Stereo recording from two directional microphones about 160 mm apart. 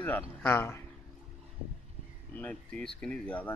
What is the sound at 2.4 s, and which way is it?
Speech, 5° left (ahead or behind).